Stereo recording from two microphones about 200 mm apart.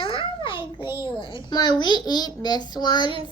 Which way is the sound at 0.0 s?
25° left (ahead or behind).